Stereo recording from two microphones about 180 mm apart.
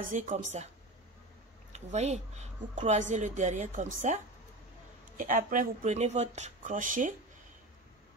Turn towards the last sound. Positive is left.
turn(degrees=-45)  # may be behind; listen again after turning